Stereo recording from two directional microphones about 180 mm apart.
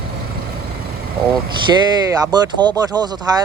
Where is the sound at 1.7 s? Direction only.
15° right (ahead or behind).